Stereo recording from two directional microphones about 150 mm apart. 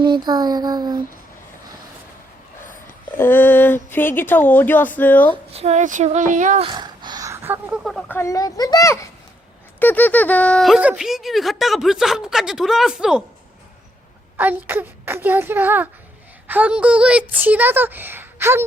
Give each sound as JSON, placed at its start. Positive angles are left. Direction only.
{"t": 0.0, "sound": "a sound", "side_deg": -30}
{"t": 3.2, "sound": "speech", "side_deg": 15}
{"t": 5.5, "sound": "speech", "side_deg": -50}
{"t": 6.6, "sound": "a sound", "side_deg": -30}
{"t": 8.0, "sound": "a child's voice", "side_deg": 15}
{"t": 14.3, "sound": "speech", "side_deg": -10}